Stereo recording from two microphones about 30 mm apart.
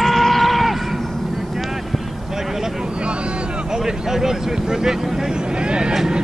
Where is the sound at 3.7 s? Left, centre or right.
Right.